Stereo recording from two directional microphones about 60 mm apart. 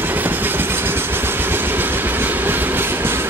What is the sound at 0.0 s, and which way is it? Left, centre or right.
Train, right.